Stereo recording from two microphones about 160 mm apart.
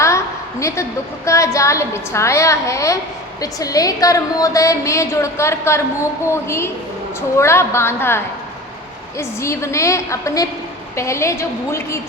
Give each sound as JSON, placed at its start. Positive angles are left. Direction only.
{"t": 0.6, "sound": "a woman's voice", "side_deg": 20}